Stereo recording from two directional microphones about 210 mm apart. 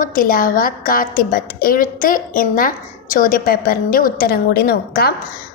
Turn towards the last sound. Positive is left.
turn(degrees=45)  # may be behind; listen again after turning